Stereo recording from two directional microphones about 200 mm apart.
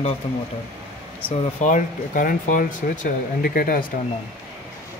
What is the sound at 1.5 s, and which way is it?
Speech, 40° left (ahead or behind).